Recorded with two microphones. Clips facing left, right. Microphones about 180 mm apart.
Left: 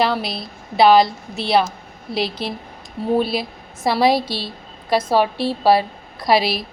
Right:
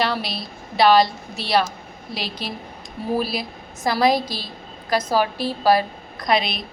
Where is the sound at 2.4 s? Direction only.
30° left (ahead or behind).